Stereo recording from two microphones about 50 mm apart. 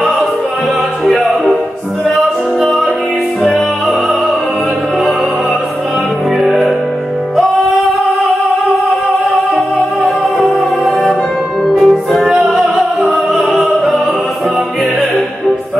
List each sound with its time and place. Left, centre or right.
2.0 s music: centre
6.4 s music: centre
11.6 s music: centre